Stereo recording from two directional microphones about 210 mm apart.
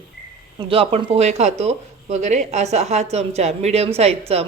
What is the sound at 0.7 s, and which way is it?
Speech, 25° right (ahead or behind).